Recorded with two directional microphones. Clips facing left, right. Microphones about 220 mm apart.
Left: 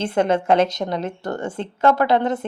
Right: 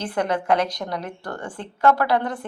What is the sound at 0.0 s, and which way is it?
A woman's voice, 25° left (ahead or behind).